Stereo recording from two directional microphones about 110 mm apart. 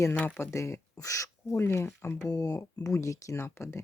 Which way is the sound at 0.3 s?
25° left (ahead or behind).